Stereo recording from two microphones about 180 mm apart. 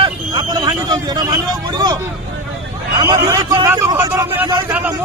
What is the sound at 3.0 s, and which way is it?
A man's voice, 15° right (ahead or behind).